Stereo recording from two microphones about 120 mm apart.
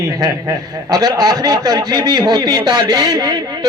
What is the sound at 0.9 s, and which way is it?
A man's voice, 35° right (ahead or behind).